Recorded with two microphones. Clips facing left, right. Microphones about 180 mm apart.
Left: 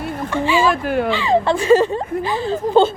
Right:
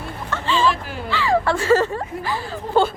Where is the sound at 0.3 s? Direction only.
10° left (ahead or behind).